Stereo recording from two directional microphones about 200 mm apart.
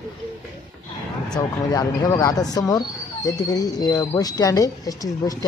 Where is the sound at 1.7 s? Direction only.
20° left (ahead or behind).